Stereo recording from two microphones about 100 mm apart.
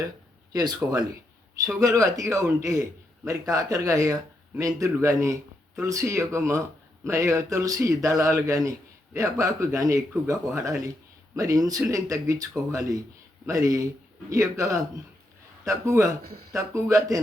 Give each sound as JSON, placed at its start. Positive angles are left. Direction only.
{"t": 0.5, "sound": "a man's voice", "side_deg": -40}